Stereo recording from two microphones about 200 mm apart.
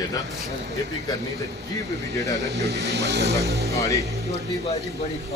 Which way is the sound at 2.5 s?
55° right (ahead or behind).